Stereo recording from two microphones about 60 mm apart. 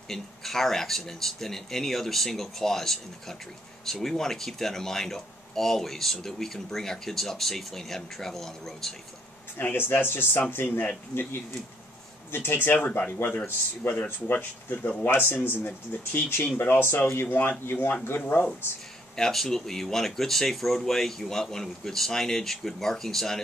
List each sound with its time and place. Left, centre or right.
0.1 s speech: centre
9.6 s speech: left
12.3 s speech: left
15.0 s speech: left
18.2 s speech: left
19.1 s speech: centre